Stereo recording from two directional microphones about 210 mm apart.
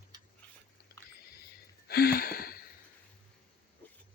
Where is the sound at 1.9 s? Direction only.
45° left (ahead or behind).